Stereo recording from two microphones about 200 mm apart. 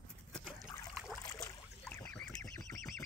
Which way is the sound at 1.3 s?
15° left (ahead or behind).